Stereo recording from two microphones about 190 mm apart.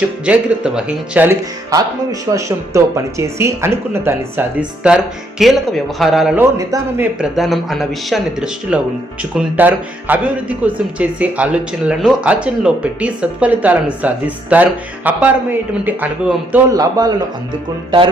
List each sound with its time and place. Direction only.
0.3 s speech: 5° right (ahead or behind)
16.7 s a man's voice: 20° right (ahead or behind)